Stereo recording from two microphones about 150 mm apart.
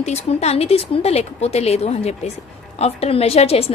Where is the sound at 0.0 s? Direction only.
45° left (ahead or behind).